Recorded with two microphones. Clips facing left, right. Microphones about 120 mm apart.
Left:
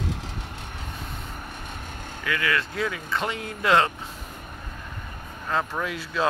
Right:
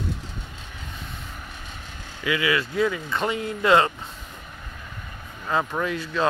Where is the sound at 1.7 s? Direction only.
50° left (ahead or behind).